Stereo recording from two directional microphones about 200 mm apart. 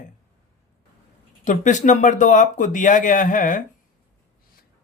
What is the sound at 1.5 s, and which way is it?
Speech, 40° left (ahead or behind).